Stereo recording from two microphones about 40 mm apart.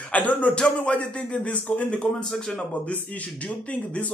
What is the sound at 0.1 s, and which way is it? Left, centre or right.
A man's voice, left.